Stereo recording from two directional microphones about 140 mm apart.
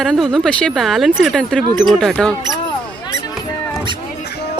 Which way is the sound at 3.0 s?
30° left (ahead or behind).